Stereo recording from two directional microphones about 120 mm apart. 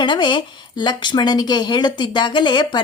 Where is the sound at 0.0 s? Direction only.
40° left (ahead or behind).